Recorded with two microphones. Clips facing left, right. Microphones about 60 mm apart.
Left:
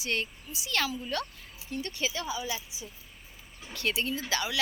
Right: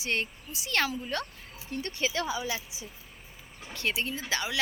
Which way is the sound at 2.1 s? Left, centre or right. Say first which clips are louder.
Right 3 dB; right.